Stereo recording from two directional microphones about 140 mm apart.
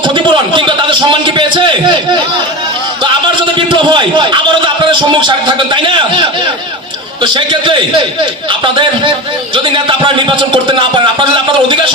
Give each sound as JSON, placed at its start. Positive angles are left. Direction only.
{"t": 0.0, "sound": "a sound", "side_deg": -35}
{"t": 3.8, "sound": "a man's voice", "side_deg": -35}
{"t": 7.2, "sound": "speech", "side_deg": -35}